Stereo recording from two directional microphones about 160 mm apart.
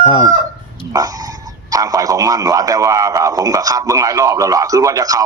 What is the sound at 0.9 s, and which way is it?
Speech, 20° right (ahead or behind).